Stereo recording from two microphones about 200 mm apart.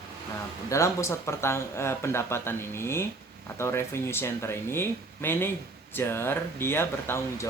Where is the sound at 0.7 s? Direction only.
15° left (ahead or behind).